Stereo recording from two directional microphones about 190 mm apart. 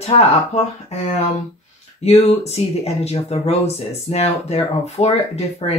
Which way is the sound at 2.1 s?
35° left (ahead or behind).